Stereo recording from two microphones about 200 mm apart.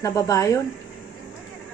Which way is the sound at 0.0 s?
15° left (ahead or behind).